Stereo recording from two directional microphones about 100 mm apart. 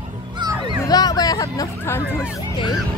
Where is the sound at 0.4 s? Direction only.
45° right (ahead or behind).